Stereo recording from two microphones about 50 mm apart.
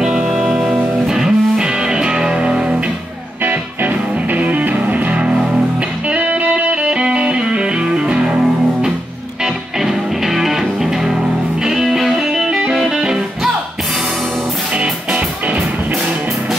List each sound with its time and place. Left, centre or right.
0.0 s music: centre
3.4 s music: right
5.2 s music: centre
6.0 s music: right
14.8 s music: right